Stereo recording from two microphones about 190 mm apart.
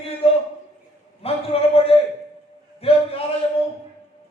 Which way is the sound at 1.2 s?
30° left (ahead or behind).